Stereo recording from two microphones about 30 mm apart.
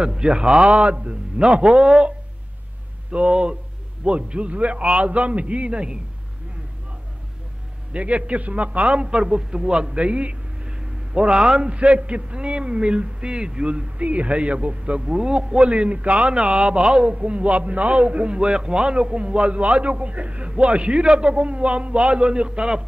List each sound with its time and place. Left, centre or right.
0.0 s a man's voice: right
0.7 s a man's voice: right
7.9 s a man's voice: right
11.7 s a man's voice: right